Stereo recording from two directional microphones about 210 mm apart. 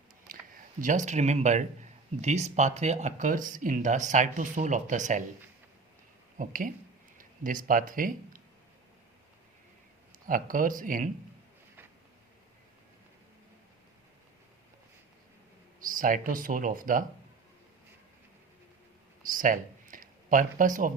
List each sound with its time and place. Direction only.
0.8 s speech: 35° right (ahead or behind)
6.3 s speech: 40° right (ahead or behind)
10.2 s speech: 40° right (ahead or behind)
15.9 s speech: 40° right (ahead or behind)
19.2 s speech: 40° right (ahead or behind)